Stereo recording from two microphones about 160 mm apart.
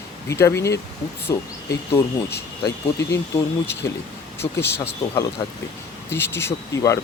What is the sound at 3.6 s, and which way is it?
Speech, 15° left (ahead or behind).